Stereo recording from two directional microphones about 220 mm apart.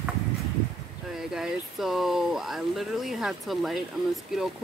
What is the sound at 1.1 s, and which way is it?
Speech, centre (ahead or behind).